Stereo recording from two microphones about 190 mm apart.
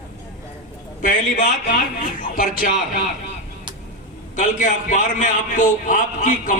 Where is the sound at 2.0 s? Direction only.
45° left (ahead or behind).